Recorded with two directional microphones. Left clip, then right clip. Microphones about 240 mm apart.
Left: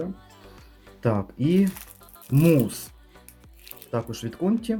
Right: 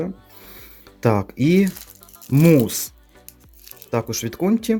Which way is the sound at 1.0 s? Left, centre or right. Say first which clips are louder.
Right 6 dB; right.